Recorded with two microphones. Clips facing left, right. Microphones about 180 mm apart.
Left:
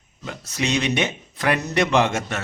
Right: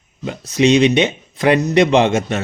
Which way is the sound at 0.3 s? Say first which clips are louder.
Right 11 dB; 20° right (ahead or behind).